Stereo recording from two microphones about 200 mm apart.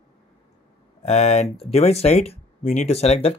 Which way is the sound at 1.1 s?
30° left (ahead or behind).